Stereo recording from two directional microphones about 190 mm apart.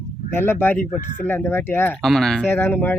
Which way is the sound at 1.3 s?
10° left (ahead or behind).